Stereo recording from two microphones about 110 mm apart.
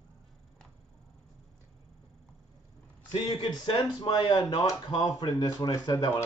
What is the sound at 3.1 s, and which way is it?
Speech, 45° left (ahead or behind).